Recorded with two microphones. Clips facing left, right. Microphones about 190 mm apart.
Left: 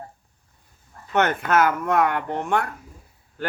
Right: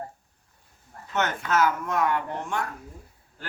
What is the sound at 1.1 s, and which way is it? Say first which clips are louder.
Speech: left 5 dB; 60° left (ahead or behind).